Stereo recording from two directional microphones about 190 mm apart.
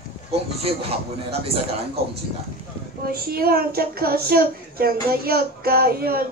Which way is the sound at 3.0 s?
50° right (ahead or behind).